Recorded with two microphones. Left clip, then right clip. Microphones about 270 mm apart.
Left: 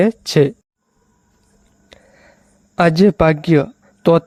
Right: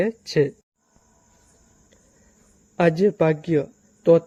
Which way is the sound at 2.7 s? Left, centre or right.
Left.